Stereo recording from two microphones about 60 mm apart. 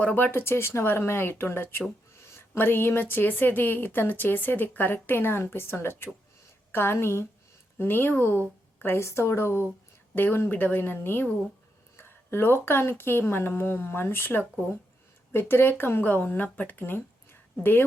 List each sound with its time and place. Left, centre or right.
0.0 s speech: left
0.3 s a woman's voice: left
9.0 s a woman's voice: left